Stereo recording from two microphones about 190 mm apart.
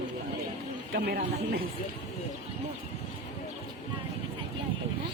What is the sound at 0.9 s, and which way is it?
Speech, 50° right (ahead or behind).